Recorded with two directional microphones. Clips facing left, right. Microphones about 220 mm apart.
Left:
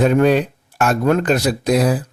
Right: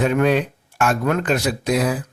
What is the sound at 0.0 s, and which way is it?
Speech, 35° left (ahead or behind).